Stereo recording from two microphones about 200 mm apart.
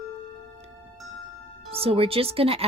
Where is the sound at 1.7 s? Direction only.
30° right (ahead or behind).